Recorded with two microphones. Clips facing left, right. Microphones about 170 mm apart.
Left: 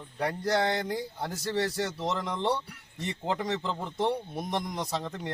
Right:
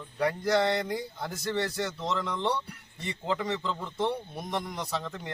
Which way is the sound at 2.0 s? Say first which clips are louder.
Even; 15° left (ahead or behind).